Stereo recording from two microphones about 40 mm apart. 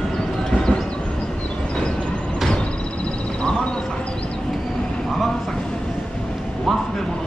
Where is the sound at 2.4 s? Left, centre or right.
Left.